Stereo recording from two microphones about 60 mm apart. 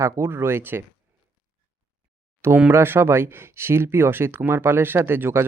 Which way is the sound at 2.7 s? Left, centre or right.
Right.